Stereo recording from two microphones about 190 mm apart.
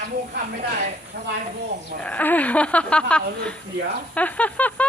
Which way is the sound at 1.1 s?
65° right (ahead or behind).